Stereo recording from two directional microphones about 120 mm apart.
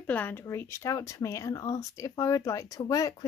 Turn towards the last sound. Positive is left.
turn(degrees=30)  # may be behind; listen again after turning